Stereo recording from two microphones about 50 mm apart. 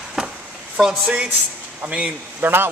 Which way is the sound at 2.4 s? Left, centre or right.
Right.